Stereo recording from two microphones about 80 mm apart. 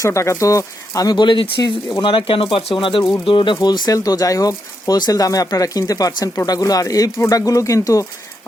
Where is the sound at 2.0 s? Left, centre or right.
Left.